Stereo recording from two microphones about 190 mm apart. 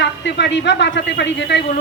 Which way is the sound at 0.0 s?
70° left (ahead or behind).